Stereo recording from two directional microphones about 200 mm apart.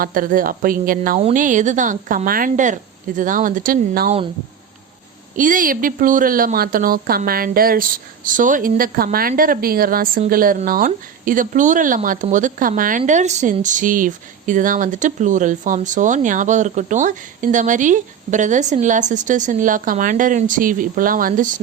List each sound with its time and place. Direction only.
0.0 s a woman's voice: 45° right (ahead or behind)
5.4 s a woman's voice: 40° right (ahead or behind)